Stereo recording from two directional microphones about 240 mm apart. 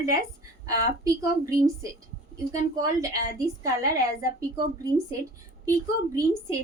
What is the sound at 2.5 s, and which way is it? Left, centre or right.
A woman's voice, centre.